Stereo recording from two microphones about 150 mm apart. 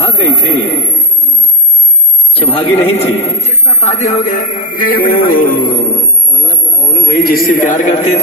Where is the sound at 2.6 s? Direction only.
35° left (ahead or behind); by 6.0 s 70° left (ahead or behind).